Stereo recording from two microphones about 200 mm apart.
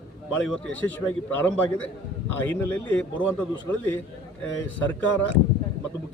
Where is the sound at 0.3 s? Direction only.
5° left (ahead or behind).